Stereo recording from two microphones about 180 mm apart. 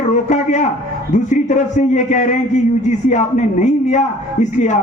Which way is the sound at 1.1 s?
45° left (ahead or behind).